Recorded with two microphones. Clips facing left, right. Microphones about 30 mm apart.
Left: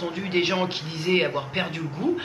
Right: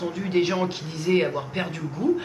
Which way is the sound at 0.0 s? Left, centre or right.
Left.